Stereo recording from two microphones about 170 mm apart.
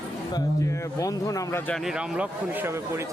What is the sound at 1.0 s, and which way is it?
Speech, 20° left (ahead or behind).